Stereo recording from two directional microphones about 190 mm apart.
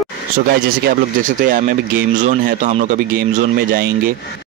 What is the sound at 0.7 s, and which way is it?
Speech, 50° right (ahead or behind).